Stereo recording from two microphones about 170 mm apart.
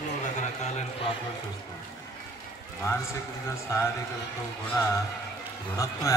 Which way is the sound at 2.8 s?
15° left (ahead or behind).